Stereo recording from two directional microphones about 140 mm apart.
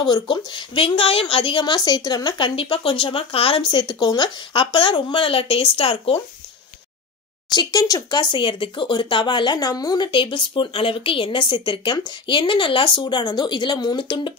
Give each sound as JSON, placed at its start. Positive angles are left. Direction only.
{"t": 0.0, "sound": "speech", "side_deg": 35}
{"t": 7.5, "sound": "speech", "side_deg": 25}